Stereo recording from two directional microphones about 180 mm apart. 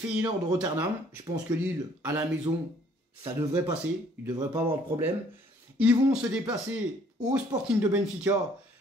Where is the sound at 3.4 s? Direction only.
20° right (ahead or behind).